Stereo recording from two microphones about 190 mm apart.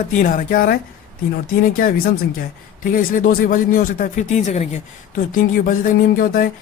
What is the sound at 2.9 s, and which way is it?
Speech, 45° left (ahead or behind).